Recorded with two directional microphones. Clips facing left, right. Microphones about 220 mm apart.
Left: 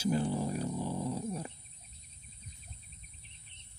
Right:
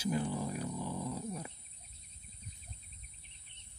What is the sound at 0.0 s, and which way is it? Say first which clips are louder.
Dog: left 4 dB; 30° left (ahead or behind).